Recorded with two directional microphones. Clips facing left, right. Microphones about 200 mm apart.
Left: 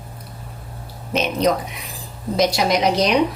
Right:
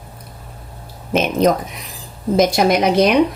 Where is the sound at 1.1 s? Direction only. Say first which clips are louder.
Right 4 dB; 50° right (ahead or behind).